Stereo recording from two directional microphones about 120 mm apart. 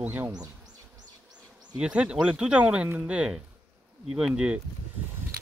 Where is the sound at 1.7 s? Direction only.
10° right (ahead or behind).